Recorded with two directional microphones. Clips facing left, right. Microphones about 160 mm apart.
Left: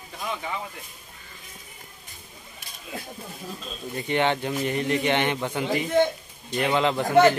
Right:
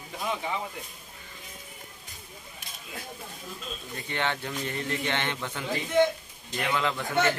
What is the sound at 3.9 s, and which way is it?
A man's voice, 20° left (ahead or behind).